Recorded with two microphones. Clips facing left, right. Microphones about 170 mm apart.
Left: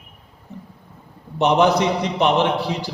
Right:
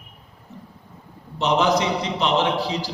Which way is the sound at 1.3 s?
60° left (ahead or behind).